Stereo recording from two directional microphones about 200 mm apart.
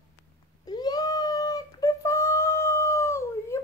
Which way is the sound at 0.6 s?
20° left (ahead or behind).